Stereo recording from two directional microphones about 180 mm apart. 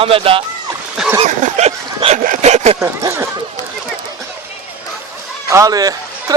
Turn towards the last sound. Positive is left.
turn(degrees=-20)  # may be behind; listen again after turning